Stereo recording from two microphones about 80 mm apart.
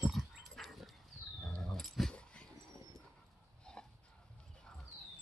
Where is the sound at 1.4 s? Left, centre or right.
Centre.